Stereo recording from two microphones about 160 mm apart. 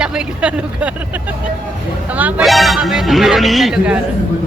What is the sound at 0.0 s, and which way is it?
Speech, 5° right (ahead or behind).